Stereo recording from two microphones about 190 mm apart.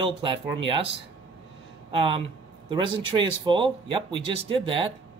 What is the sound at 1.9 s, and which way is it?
Speech, 30° right (ahead or behind).